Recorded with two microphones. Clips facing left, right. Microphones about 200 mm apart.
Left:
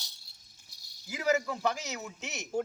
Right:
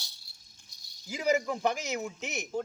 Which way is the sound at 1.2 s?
20° right (ahead or behind).